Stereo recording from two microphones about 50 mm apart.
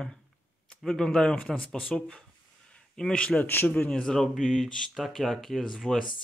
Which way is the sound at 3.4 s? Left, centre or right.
Left.